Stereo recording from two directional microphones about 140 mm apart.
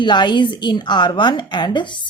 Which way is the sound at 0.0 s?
30° left (ahead or behind).